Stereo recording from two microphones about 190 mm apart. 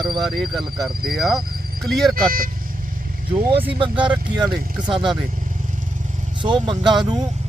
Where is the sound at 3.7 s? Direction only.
25° right (ahead or behind).